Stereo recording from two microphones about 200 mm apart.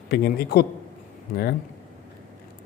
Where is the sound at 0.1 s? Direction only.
50° left (ahead or behind).